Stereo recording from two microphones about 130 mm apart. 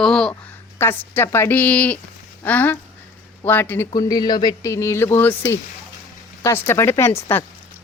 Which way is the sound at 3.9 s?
30° left (ahead or behind).